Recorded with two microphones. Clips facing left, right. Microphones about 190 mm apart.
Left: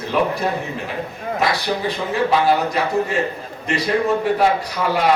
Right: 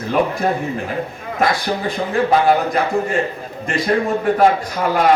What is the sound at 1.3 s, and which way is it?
A man's voice, 50° right (ahead or behind).